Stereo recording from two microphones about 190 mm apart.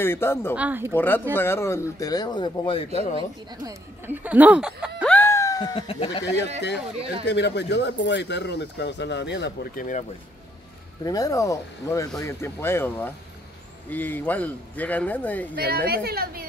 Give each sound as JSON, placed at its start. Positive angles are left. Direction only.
{"t": 0.0, "sound": "speech", "side_deg": 10}
{"t": 0.6, "sound": "speech", "side_deg": -10}
{"t": 0.9, "sound": "speech", "side_deg": 10}
{"t": 3.6, "sound": "speech", "side_deg": -10}
{"t": 5.0, "sound": "a sound", "side_deg": 10}
{"t": 6.2, "sound": "speech", "side_deg": 65}
{"t": 7.0, "sound": "speech", "side_deg": -30}
{"t": 7.2, "sound": "speech", "side_deg": 65}
{"t": 11.1, "sound": "speech", "side_deg": 20}
{"t": 15.6, "sound": "a woman's voice", "side_deg": -55}